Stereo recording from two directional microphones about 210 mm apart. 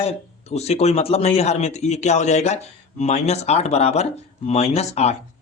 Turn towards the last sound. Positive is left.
turn(degrees=30)  # may be behind; listen again after turning